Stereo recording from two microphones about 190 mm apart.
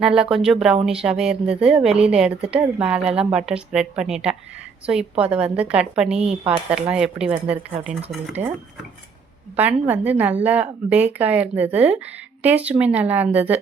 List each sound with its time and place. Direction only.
0.0 s speech: 5° right (ahead or behind)
8.4 s speech: 40° right (ahead or behind)
9.6 s a woman's voice: 10° right (ahead or behind)